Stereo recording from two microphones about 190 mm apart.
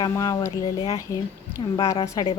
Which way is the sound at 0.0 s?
20° left (ahead or behind).